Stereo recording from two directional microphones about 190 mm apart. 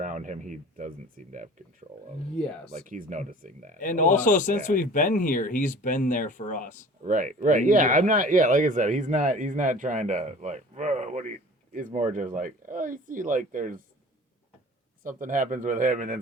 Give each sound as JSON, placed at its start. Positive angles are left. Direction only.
{"t": 0.0, "sound": "speech", "side_deg": -40}
{"t": 2.4, "sound": "speech", "side_deg": 5}
{"t": 2.7, "sound": "speech", "side_deg": -45}
{"t": 3.8, "sound": "speech", "side_deg": 45}
{"t": 7.0, "sound": "speech", "side_deg": -40}
{"t": 15.0, "sound": "speech", "side_deg": -45}